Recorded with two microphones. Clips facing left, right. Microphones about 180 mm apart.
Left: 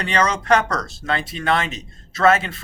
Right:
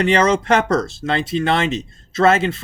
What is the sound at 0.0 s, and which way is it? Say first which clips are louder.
Speech: right 6 dB; 25° right (ahead or behind).